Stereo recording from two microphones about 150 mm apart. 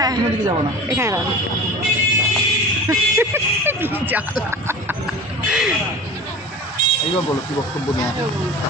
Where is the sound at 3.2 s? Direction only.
15° right (ahead or behind).